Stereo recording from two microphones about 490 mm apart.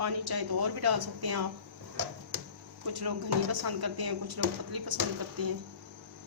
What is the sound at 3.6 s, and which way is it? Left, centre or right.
A woman's voice, right.